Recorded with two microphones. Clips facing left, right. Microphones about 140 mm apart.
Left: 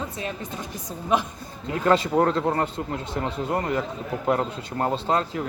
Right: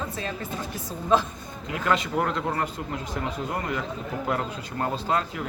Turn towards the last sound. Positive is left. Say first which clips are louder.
# left 3 dB
turn(degrees=30)  # may be behind; listen again after turning